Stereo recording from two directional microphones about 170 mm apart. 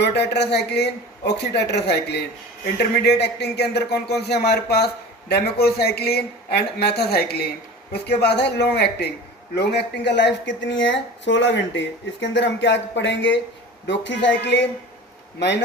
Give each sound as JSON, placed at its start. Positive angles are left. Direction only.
{"t": 0.0, "sound": "a man's voice", "side_deg": 80}